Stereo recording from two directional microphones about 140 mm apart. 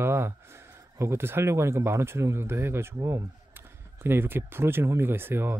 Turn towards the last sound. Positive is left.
turn(degrees=-15)  # may be behind; listen again after turning